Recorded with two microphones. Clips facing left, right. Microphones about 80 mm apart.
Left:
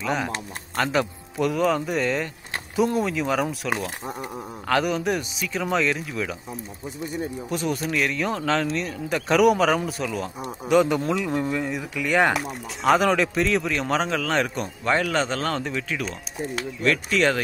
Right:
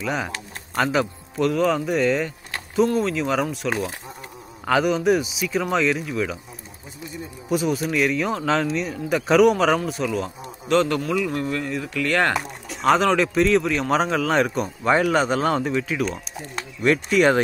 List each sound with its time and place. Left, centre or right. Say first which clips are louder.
0.0 s speech: even; centre
7.4 s speech: right 7 dB; centre
10.7 s speech: left 1 dB; centre
11.0 s speech: right 1 dB; left
12.4 s speech: even; centre